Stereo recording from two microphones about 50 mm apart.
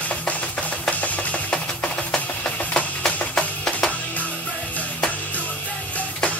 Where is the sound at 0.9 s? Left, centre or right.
Left.